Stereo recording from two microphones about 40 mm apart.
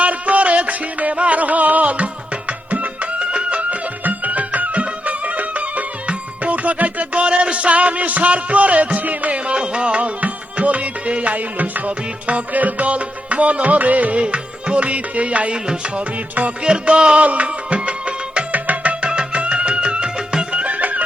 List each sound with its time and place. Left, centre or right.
0.0 s music: right
9.5 s music: right
16.6 s music: right
20.5 s music: right